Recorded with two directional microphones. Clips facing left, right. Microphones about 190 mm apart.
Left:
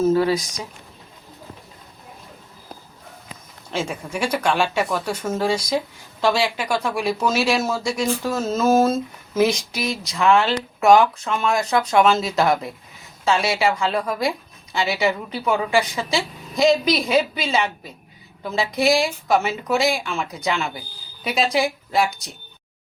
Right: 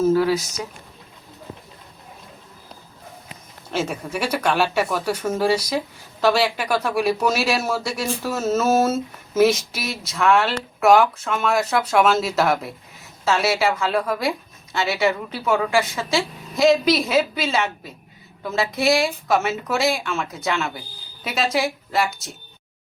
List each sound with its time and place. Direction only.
0.0 s speech: 5° right (ahead or behind)
3.7 s speech: 5° right (ahead or behind)